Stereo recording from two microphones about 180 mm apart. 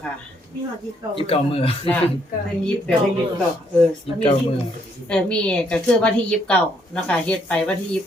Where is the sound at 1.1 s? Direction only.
30° left (ahead or behind).